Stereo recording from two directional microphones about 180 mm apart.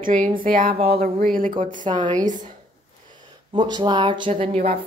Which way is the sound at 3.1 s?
25° right (ahead or behind).